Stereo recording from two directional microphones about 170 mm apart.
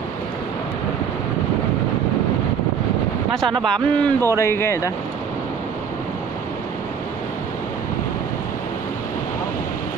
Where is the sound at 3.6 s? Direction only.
5° left (ahead or behind).